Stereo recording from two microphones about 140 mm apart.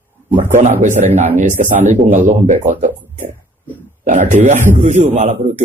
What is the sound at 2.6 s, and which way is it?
Speech, 70° right (ahead or behind).